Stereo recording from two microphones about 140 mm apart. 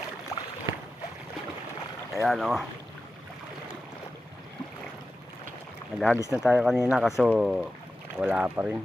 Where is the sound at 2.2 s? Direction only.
Centre (ahead or behind).